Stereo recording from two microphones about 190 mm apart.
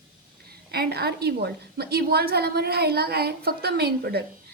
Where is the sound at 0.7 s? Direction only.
55° right (ahead or behind).